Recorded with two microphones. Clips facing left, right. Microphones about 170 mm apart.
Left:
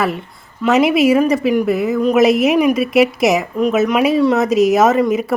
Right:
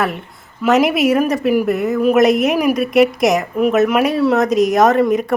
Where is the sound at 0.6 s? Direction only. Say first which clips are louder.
Left 1 dB; centre (ahead or behind).